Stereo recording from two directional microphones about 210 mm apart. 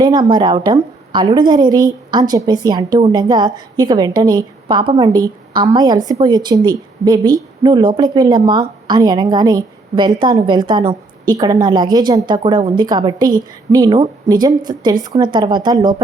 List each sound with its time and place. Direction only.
0.0 s speech: 20° right (ahead or behind)